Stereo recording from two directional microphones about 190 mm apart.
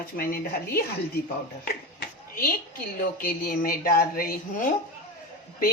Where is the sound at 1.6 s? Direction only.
55° left (ahead or behind).